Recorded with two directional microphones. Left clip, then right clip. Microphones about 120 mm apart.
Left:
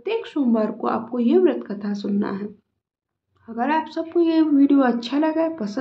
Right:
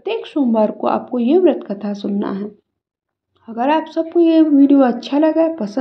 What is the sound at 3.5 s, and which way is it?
A woman's voice, 35° right (ahead or behind).